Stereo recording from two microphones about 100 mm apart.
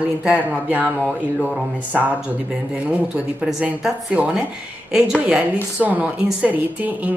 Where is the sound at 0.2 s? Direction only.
15° right (ahead or behind).